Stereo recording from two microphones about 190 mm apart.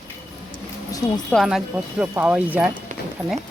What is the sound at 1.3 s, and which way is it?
Speech, centre (ahead or behind).